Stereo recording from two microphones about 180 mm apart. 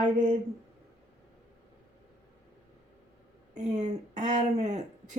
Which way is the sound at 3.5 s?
40° right (ahead or behind).